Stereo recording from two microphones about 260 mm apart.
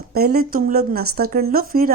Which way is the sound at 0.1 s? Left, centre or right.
Right.